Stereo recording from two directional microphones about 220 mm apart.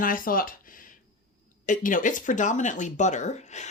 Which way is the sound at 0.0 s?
40° left (ahead or behind).